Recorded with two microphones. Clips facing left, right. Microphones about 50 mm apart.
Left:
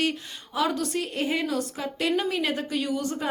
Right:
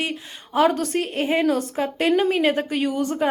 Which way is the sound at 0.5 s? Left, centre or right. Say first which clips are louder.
Right 7 dB; right.